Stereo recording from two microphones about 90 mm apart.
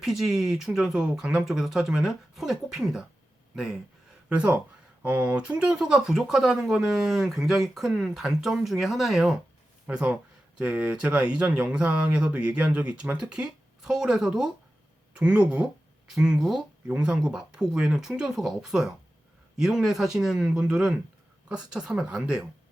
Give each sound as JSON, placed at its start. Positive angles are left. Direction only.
{"t": 0.0, "sound": "speech", "side_deg": -5}
{"t": 5.5, "sound": "speech", "side_deg": -5}